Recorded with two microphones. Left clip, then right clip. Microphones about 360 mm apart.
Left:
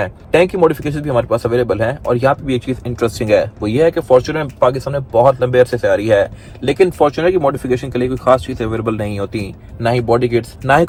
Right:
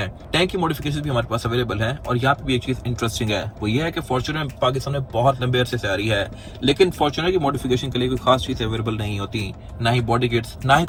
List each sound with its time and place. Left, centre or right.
0.3 s speech: left